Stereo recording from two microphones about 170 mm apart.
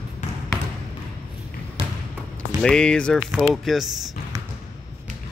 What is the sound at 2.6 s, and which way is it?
Speech, 5° left (ahead or behind).